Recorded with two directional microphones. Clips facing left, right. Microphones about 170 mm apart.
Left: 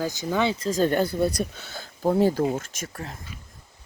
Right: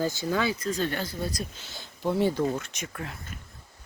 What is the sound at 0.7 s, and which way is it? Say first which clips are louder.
Speech: left 8 dB; 45° left (ahead or behind).